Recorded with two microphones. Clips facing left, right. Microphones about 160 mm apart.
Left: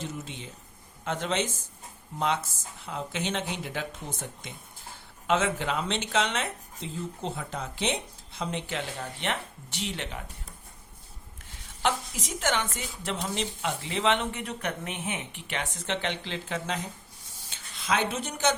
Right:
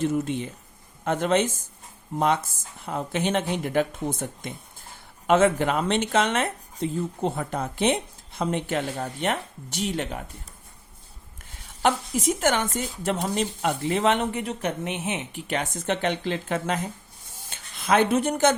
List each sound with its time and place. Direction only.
0.0 s speech: 55° right (ahead or behind)
5.2 s speech: 50° right (ahead or behind)
11.8 s speech: 50° right (ahead or behind)
14.4 s speech: 30° right (ahead or behind)
15.3 s speech: 40° right (ahead or behind)